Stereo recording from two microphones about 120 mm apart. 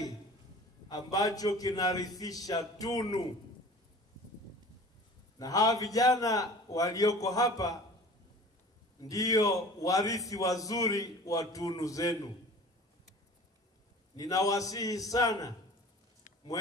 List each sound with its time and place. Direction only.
0.8 s a man's voice: 30° left (ahead or behind)
5.4 s a man's voice: 30° left (ahead or behind)
9.0 s a man's voice: 30° left (ahead or behind)
14.1 s a man's voice: 30° left (ahead or behind)